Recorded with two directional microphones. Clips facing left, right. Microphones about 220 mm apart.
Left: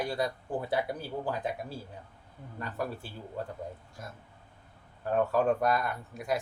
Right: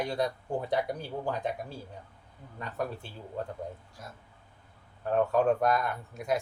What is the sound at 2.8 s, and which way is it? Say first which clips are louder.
Speech: right 1 dB; 5° left (ahead or behind).